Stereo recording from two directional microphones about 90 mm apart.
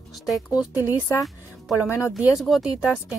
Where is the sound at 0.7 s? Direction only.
25° right (ahead or behind).